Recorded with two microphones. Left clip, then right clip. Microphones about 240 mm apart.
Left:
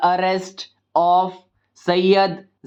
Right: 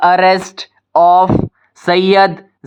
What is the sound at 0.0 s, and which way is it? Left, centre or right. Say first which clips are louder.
Speech: right 9 dB; right.